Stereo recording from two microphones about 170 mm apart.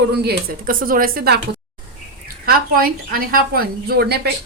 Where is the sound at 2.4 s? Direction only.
60° right (ahead or behind).